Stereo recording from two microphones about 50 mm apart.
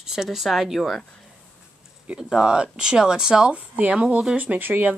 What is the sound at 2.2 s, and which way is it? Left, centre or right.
Speech, centre.